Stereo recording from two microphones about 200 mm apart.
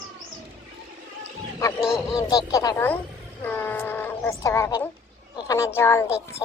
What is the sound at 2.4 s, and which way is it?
A woman's voice, 15° left (ahead or behind).